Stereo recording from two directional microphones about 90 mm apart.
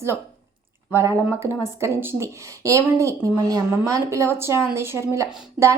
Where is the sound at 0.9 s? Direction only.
30° right (ahead or behind).